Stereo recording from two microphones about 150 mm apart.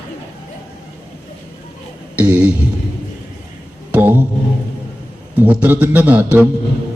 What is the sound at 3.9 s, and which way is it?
Music, 10° right (ahead or behind).